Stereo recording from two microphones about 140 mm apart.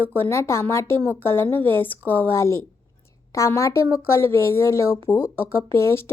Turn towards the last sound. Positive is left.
turn(degrees=20)  # may be behind; listen again after turning